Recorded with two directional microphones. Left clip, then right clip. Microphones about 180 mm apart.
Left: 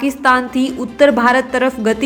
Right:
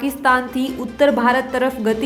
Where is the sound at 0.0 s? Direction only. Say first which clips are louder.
Left 3 dB; 15° left (ahead or behind).